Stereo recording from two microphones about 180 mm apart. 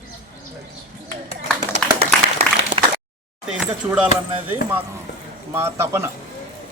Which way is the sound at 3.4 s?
5° right (ahead or behind).